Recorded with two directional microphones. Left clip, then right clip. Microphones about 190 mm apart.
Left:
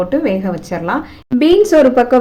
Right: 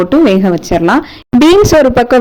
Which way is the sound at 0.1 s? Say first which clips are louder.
Right 8 dB; 45° right (ahead or behind).